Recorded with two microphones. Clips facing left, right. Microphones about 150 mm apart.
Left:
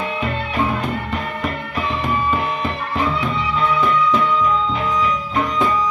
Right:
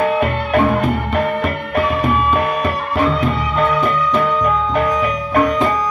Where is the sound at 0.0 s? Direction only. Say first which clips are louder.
Right 7 dB; 55° right (ahead or behind).